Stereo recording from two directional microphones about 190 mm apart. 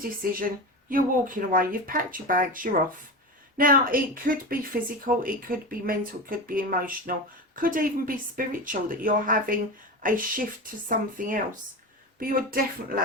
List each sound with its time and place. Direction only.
0.2 s speech: 50° right (ahead or behind)